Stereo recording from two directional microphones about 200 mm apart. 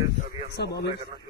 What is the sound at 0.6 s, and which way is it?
Speech, 55° left (ahead or behind).